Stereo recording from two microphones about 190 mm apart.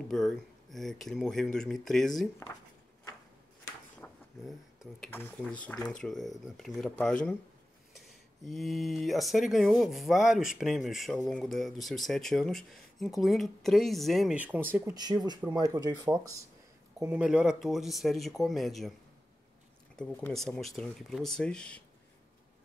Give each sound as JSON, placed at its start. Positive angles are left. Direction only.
{"t": 0.1, "sound": "speech", "side_deg": 0}
{"t": 4.0, "sound": "vehicle", "side_deg": 10}
{"t": 5.0, "sound": "speech", "side_deg": 10}
{"t": 8.5, "sound": "speech", "side_deg": 0}
{"t": 15.0, "sound": "speech", "side_deg": -20}
{"t": 17.0, "sound": "speech", "side_deg": -5}
{"t": 20.0, "sound": "speech", "side_deg": 10}